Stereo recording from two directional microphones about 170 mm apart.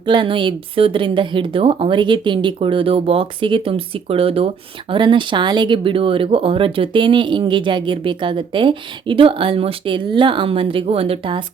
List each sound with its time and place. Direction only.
0.0 s speech: 30° right (ahead or behind)